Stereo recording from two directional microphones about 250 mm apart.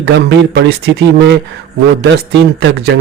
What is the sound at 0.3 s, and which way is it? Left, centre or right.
A man's voice, right.